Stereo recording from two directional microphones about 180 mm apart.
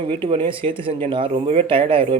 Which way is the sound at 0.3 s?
30° right (ahead or behind).